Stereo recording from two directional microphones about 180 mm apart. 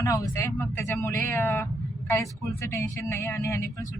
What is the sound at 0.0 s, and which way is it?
Speech, 15° left (ahead or behind).